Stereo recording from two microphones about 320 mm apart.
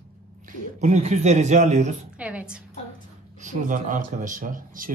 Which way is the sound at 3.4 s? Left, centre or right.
Right.